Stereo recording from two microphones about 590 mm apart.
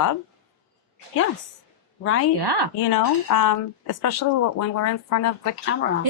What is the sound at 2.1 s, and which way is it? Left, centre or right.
Speech, left.